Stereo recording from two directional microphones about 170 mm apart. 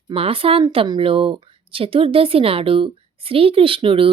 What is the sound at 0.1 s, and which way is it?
Speech, 35° right (ahead or behind).